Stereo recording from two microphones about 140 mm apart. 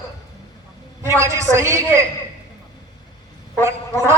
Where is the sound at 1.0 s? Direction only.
20° right (ahead or behind).